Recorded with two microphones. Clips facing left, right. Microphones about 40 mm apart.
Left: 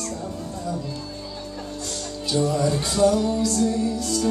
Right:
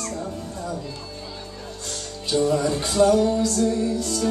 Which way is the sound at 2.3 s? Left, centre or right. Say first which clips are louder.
Right 1 dB; centre.